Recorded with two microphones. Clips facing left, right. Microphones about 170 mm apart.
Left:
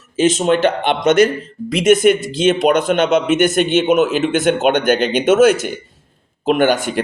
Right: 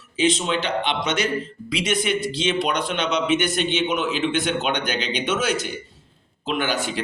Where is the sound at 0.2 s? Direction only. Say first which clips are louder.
Left 8 dB; 45° left (ahead or behind).